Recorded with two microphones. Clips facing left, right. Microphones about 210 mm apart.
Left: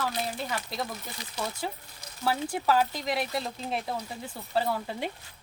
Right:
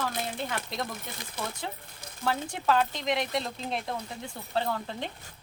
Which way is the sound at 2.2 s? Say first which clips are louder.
Left 1 dB; 5° left (ahead or behind).